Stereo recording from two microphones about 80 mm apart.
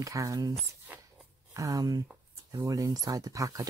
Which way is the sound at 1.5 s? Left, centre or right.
Right.